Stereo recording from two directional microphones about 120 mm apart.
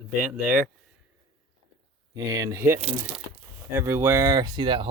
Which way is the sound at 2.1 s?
25° right (ahead or behind).